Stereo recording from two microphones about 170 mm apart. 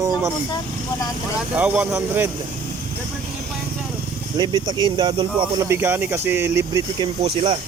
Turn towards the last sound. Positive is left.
turn(degrees=-35)  # may be behind; listen again after turning